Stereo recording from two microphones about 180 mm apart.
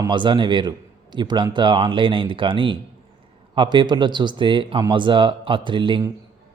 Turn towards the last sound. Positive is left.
turn(degrees=-25)  # may be behind; listen again after turning